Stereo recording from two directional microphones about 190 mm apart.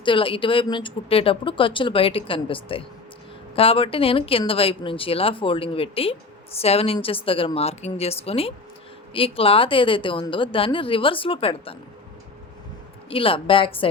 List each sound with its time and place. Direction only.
0.0 s a woman's voice: 25° left (ahead or behind)
13.1 s a woman's voice: 30° left (ahead or behind)